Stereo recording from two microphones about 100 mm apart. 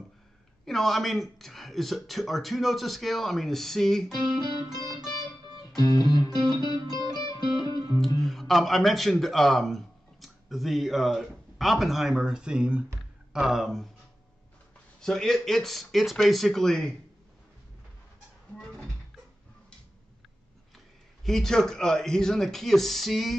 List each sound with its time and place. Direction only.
0.7 s speech: centre (ahead or behind)
5.8 s music: 40° left (ahead or behind)
6.3 s music: 45° right (ahead or behind)
7.2 s music: 40° left (ahead or behind)
8.0 s speech: centre (ahead or behind)
15.0 s speech: 5° left (ahead or behind)
18.6 s speech: 5° left (ahead or behind)
21.2 s speech: 5° left (ahead or behind)